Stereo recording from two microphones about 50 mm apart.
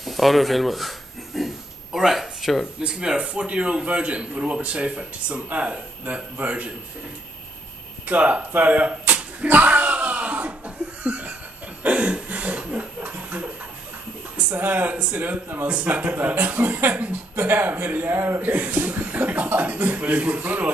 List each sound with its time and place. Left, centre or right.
0.0 s a sound: centre
2.9 s a man's voice: centre
8.1 s slap: right
11.8 s chuckle: right
14.3 s speech: right
15.0 s a man's voice: right
15.2 s speech: right
15.6 s speech: right
18.0 s speech: right
18.4 s speech: right